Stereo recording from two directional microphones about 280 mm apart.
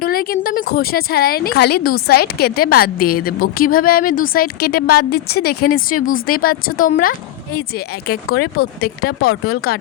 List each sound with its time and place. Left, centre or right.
0.0 s speech: left